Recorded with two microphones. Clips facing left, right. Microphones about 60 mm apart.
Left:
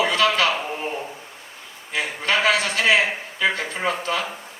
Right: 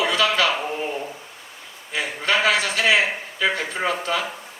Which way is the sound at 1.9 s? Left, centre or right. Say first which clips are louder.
Even; left.